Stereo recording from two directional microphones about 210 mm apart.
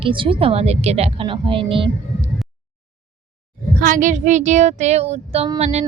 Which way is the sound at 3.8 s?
40° right (ahead or behind).